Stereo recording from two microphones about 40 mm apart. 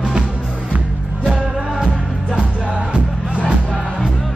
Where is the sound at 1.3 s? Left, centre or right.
Centre.